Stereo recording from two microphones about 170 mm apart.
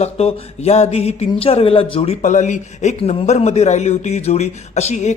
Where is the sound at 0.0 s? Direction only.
35° left (ahead or behind).